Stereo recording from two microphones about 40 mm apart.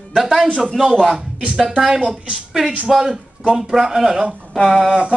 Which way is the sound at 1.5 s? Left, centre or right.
Centre.